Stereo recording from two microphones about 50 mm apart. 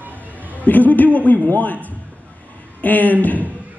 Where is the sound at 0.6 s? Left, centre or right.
Left.